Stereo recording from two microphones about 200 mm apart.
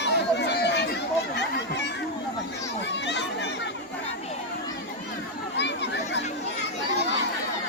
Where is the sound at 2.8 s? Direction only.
60° left (ahead or behind).